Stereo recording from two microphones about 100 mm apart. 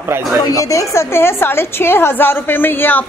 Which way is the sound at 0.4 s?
35° left (ahead or behind).